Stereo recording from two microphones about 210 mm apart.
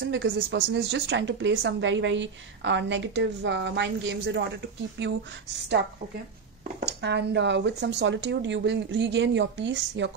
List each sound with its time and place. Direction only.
0.0 s a woman's voice: 60° right (ahead or behind)
7.0 s a woman's voice: 55° right (ahead or behind)